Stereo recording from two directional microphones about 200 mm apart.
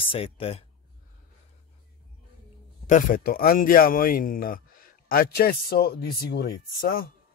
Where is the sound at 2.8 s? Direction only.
40° left (ahead or behind).